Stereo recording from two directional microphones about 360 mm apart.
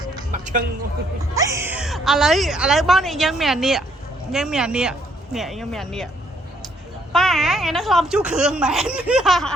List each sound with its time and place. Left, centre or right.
0.0 s a sound: centre
0.3 s a woman's voice: right
1.2 s speech: centre
7.1 s speech: centre